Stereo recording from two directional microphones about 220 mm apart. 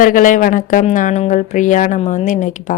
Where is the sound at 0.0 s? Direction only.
35° left (ahead or behind).